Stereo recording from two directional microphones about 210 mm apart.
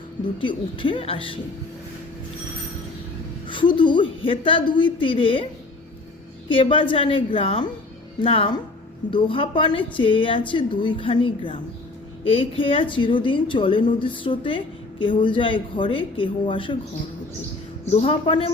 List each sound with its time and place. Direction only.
0.3 s a woman's voice: 25° left (ahead or behind)
3.4 s a woman's voice: 25° left (ahead or behind)
6.5 s a woman's voice: 25° left (ahead or behind)
17.8 s a woman's voice: 30° left (ahead or behind)